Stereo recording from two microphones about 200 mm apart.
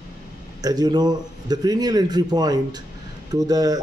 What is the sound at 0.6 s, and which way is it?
A man's voice, 20° right (ahead or behind).